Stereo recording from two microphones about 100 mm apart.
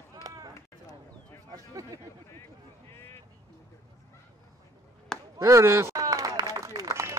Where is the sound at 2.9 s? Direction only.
25° left (ahead or behind).